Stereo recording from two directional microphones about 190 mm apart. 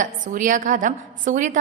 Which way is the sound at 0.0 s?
45° right (ahead or behind).